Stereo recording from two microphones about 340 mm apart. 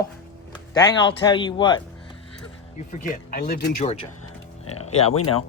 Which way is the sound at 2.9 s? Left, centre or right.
Left.